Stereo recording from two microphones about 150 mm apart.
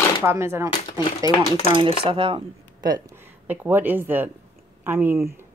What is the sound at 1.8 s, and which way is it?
Speech, 35° right (ahead or behind).